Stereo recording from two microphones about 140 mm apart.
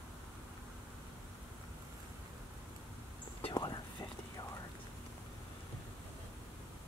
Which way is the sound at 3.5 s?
30° left (ahead or behind).